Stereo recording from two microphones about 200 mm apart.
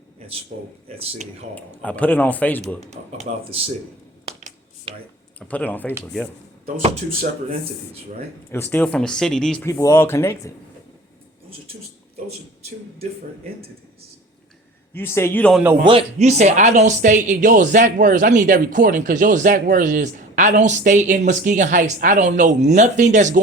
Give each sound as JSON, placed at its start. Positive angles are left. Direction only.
{"t": 0.9, "sound": "speech", "side_deg": -30}
{"t": 1.5, "sound": "speech", "side_deg": 5}
{"t": 3.0, "sound": "speech", "side_deg": -45}
{"t": 4.3, "sound": "finger snapping", "side_deg": -35}
{"t": 5.5, "sound": "speech", "side_deg": 10}
{"t": 6.7, "sound": "speech", "side_deg": -30}
{"t": 8.4, "sound": "speech", "side_deg": 10}
{"t": 9.6, "sound": "speech", "side_deg": 15}
{"t": 14.9, "sound": "speech", "side_deg": 10}
{"t": 15.9, "sound": "speech", "side_deg": -30}